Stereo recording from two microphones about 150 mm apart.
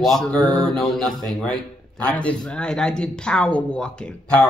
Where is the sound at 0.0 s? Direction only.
5° left (ahead or behind).